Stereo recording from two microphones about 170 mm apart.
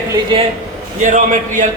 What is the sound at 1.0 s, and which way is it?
Speech, 45° right (ahead or behind).